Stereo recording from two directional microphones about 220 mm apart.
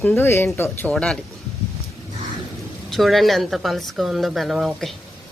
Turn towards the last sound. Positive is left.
turn(degrees=0)  # may be behind; listen again after turning